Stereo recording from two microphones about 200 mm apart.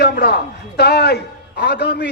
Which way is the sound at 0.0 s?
55° left (ahead or behind).